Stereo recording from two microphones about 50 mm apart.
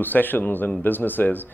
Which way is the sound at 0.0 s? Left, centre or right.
Left.